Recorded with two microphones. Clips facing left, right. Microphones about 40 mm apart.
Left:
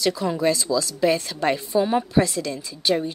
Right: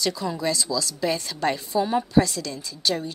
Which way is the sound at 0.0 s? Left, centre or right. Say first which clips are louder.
Left 4 dB; left.